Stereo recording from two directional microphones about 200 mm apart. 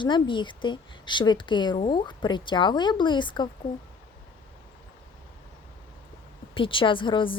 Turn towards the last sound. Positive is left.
turn(degrees=25)  # may be behind; listen again after turning